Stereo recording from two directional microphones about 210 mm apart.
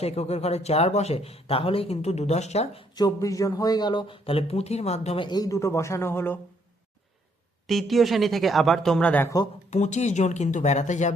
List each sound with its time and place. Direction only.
0.0 s speech: 30° left (ahead or behind)
2.9 s speech: 15° left (ahead or behind)
7.7 s speech: centre (ahead or behind)
9.6 s speech: 35° left (ahead or behind)